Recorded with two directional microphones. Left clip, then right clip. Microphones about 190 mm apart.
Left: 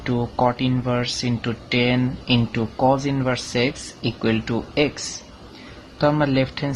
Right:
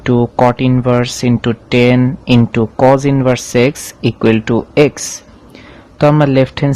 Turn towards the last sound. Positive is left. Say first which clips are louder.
# right 9 dB
turn(degrees=-45)  # may be behind; listen again after turning